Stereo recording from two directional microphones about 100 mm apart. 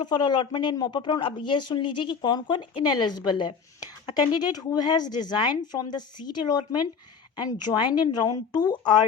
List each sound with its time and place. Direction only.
0.0 s speech: 45° left (ahead or behind)